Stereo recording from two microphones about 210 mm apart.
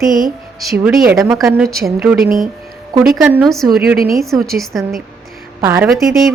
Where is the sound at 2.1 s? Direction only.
45° right (ahead or behind).